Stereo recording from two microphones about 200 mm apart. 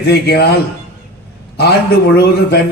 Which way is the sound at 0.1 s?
55° left (ahead or behind).